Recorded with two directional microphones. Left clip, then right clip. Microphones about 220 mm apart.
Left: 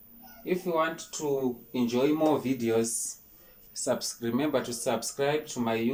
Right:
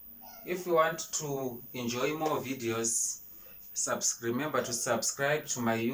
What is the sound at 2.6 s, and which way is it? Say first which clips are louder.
Speech: left 4 dB; 25° left (ahead or behind).